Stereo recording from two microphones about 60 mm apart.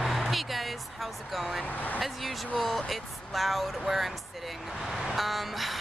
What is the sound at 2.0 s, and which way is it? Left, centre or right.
Speech, centre.